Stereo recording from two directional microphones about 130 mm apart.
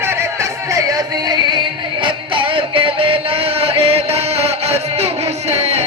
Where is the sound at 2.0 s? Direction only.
40° right (ahead or behind).